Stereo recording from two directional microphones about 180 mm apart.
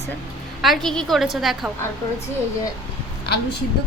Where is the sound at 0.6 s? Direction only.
Centre (ahead or behind).